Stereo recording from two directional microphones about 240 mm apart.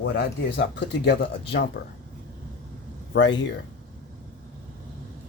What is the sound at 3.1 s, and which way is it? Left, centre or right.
Speech, left.